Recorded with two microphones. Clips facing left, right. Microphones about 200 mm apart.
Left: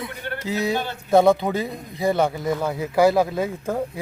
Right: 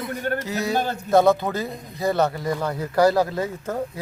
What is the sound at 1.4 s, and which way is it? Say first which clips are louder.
A man's voice: left 2 dB; 15° left (ahead or behind).